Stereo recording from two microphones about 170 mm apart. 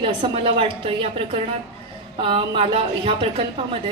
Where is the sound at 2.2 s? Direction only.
35° right (ahead or behind).